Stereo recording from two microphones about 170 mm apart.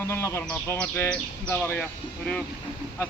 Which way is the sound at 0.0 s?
15° left (ahead or behind).